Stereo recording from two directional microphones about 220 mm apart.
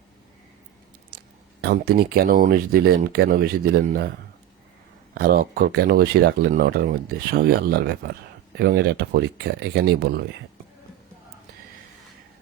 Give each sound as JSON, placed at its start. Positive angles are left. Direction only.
{"t": 1.6, "sound": "speech", "side_deg": -45}
{"t": 5.1, "sound": "speech", "side_deg": -45}